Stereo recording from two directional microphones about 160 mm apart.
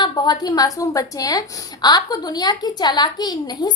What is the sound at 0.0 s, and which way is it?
A woman's voice, 25° left (ahead or behind).